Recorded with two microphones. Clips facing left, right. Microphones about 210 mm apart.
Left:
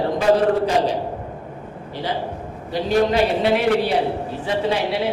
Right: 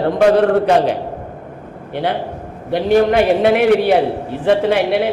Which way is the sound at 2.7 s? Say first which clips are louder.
Right 5 dB; 60° right (ahead or behind).